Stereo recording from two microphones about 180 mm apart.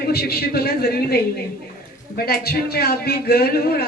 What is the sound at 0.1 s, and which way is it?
A man's voice, 60° left (ahead or behind).